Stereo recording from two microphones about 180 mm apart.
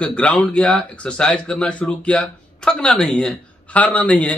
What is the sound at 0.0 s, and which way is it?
Speech, 5° left (ahead or behind).